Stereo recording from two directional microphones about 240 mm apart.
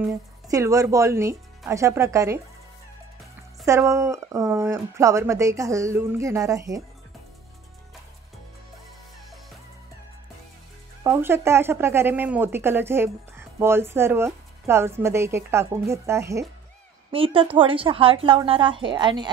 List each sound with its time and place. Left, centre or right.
0.1 s speech: centre
3.6 s speech: centre
11.1 s speech: centre
17.1 s a woman's voice: right